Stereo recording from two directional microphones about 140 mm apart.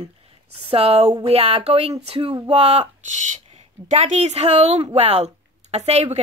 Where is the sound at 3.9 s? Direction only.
55° right (ahead or behind).